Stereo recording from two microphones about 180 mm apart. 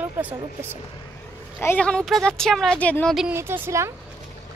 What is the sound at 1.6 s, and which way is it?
Speech, 10° left (ahead or behind).